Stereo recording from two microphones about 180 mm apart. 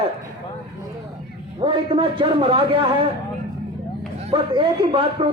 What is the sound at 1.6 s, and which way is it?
A man's voice, 30° right (ahead or behind).